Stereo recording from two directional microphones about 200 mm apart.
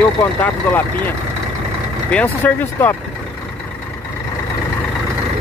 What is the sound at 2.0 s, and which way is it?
Speech, 5° left (ahead or behind).